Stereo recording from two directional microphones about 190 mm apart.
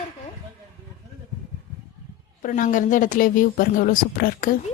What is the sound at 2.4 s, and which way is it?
Speech, 45° left (ahead or behind).